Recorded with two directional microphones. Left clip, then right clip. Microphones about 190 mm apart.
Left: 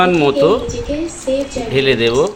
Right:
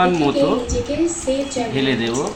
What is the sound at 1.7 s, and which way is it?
Speech, 50° left (ahead or behind).